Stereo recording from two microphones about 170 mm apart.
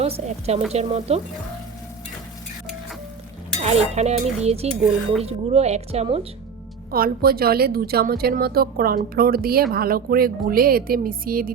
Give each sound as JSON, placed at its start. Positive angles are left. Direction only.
{"t": 0.0, "sound": "speech", "side_deg": -35}
{"t": 3.6, "sound": "speech", "side_deg": -40}
{"t": 6.9, "sound": "a woman's voice", "side_deg": -60}